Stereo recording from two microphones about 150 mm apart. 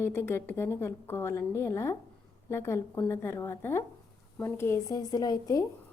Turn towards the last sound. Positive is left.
turn(degrees=25)  # may be behind; listen again after turning